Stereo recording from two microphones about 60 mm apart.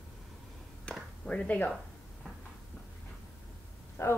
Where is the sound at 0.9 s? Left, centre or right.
Centre.